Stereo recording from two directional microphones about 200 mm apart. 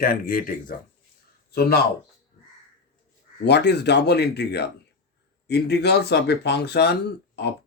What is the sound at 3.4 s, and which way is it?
Speech, 55° left (ahead or behind).